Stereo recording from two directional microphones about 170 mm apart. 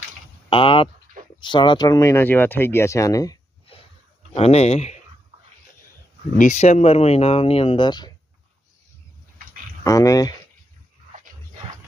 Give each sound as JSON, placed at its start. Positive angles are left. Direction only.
{"t": 0.5, "sound": "speech", "side_deg": 30}
{"t": 4.4, "sound": "speech", "side_deg": 35}
{"t": 6.3, "sound": "speech", "side_deg": 50}
{"t": 9.8, "sound": "speech", "side_deg": 20}